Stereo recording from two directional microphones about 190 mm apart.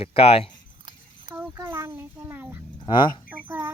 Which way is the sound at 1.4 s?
10° right (ahead or behind).